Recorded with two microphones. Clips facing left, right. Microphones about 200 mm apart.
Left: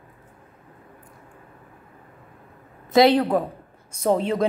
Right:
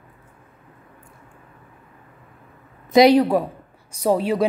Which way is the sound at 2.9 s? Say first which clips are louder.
Right 3 dB; 15° right (ahead or behind).